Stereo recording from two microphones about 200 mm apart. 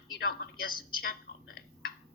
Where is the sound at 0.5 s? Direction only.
45° left (ahead or behind).